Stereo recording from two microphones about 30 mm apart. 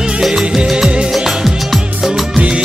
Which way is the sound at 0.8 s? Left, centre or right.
Right.